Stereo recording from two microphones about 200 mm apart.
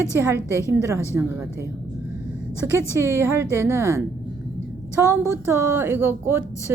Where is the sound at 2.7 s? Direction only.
15° right (ahead or behind).